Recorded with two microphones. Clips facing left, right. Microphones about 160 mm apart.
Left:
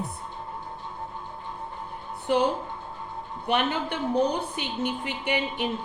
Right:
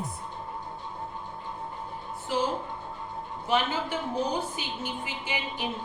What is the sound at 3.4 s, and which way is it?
A woman's voice, 65° left (ahead or behind).